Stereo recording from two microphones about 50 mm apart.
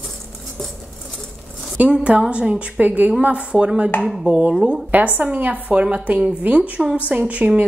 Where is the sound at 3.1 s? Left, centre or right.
Right.